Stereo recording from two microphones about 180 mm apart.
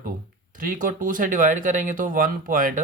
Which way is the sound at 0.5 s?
50° right (ahead or behind).